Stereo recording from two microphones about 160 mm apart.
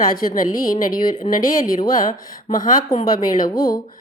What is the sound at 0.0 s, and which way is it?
A woman's voice, 60° left (ahead or behind).